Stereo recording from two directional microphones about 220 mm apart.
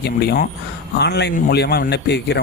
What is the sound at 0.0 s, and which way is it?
Speech, 45° left (ahead or behind).